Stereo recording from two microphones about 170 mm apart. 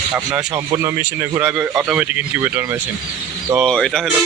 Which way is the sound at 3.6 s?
5° left (ahead or behind).